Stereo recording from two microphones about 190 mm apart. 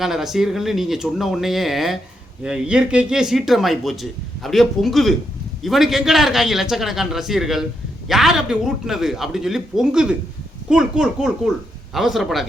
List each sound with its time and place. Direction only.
0.0 s speech: centre (ahead or behind)